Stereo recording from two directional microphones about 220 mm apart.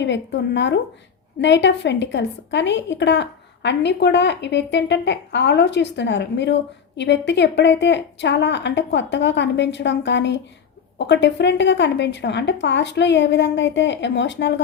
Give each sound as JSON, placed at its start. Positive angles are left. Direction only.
{"t": 0.0, "sound": "a woman's voice", "side_deg": 55}